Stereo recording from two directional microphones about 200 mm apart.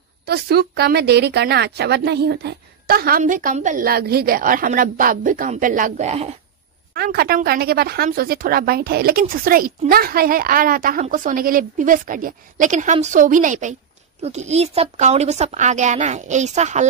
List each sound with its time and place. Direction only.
0.2 s speech: 55° right (ahead or behind); by 6.3 s 35° right (ahead or behind)
6.9 s a woman's voice: 50° right (ahead or behind); by 16.8 s 35° right (ahead or behind)